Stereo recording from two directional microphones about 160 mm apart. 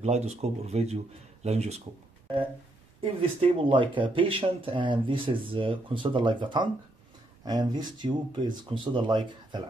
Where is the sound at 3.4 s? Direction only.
30° right (ahead or behind).